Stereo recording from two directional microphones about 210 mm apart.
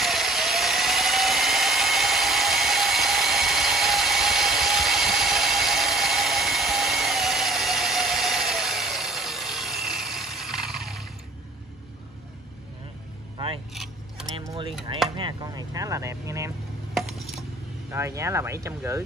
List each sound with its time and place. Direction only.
0.0 s tools: centre (ahead or behind)
14.3 s keys jangling: 20° right (ahead or behind)
15.0 s a sound: 20° right (ahead or behind)
16.9 s glass: centre (ahead or behind)
17.9 s speech: 15° right (ahead or behind)